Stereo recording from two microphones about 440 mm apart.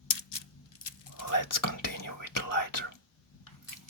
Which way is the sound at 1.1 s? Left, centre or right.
Left.